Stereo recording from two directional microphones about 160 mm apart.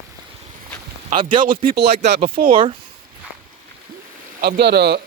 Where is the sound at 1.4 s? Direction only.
60° right (ahead or behind).